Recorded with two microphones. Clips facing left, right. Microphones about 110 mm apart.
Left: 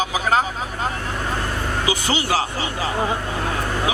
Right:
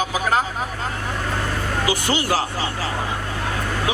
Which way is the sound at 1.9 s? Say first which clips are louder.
Even; 15° left (ahead or behind).